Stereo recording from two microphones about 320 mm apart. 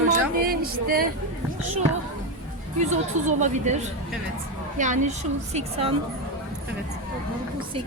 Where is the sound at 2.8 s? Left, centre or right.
Right.